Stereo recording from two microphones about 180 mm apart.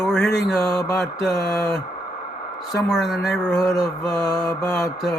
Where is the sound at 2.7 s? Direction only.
Centre (ahead or behind).